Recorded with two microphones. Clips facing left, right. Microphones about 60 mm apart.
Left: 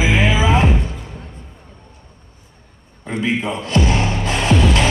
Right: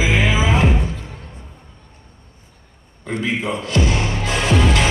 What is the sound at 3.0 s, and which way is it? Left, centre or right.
Music, left.